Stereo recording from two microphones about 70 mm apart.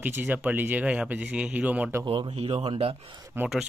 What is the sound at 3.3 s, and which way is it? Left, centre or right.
Speech, right.